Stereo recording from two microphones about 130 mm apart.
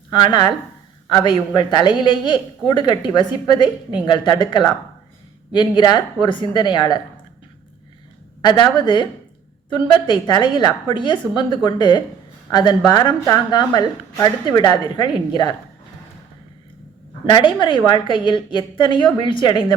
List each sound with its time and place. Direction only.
0.1 s speech: 35° left (ahead or behind)
8.4 s speech: 35° left (ahead or behind)
17.3 s speech: 40° left (ahead or behind)